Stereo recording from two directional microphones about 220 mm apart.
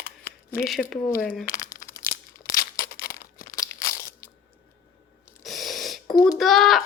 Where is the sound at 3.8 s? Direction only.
15° left (ahead or behind).